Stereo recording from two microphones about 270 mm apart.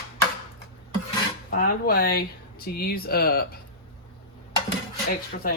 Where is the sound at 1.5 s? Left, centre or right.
Left.